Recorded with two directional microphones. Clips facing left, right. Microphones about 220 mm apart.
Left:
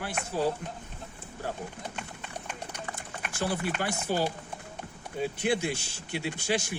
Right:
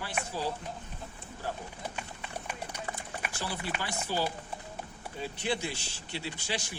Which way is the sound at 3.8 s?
50° left (ahead or behind).